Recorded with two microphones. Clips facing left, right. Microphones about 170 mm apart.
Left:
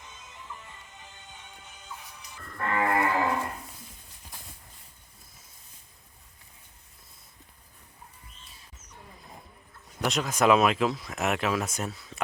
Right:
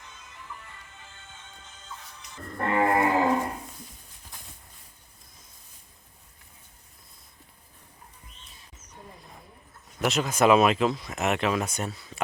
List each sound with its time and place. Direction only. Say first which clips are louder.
0.0 s music: even; 20° left (ahead or behind)
2.6 s livestock: right 3 dB; 30° right (ahead or behind)
10.0 s speech: right 2 dB; centre (ahead or behind)